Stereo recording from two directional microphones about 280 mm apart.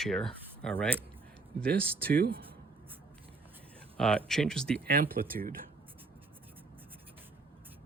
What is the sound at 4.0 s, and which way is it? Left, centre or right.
Speech, centre.